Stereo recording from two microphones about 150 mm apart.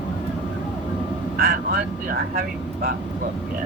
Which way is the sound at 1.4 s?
90° right.